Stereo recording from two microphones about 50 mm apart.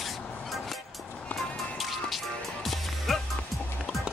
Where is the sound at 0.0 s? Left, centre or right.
Centre.